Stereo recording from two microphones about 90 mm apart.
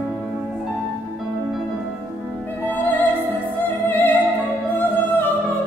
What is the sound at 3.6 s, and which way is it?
Music, 20° left (ahead or behind).